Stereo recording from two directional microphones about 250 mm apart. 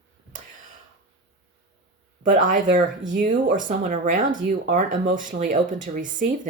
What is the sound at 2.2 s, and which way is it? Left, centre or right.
Speech, right.